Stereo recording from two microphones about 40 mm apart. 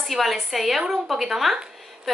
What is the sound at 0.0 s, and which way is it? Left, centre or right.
A woman's voice, centre.